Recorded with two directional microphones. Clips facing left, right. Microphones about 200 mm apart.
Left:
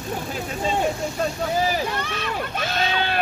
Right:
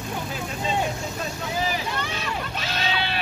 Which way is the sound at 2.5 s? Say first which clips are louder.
Left 5 dB; 50° left (ahead or behind).